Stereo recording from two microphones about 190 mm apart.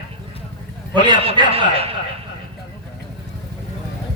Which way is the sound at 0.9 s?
25° right (ahead or behind).